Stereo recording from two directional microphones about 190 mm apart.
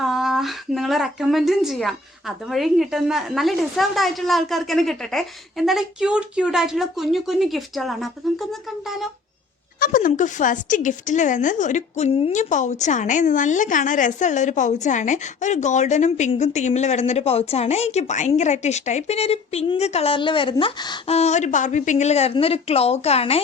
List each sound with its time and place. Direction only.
0.0 s speech: centre (ahead or behind)
9.8 s speech: 45° left (ahead or behind)